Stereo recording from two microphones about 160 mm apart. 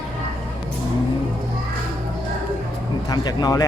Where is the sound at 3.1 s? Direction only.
25° left (ahead or behind).